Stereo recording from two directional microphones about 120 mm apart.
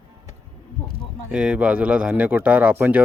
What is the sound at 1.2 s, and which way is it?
Speech, 5° right (ahead or behind).